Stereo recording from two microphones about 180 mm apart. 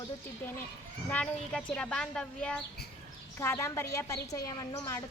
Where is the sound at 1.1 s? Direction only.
5° left (ahead or behind).